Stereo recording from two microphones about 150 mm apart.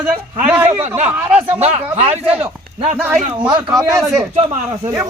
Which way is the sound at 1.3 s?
10° right (ahead or behind).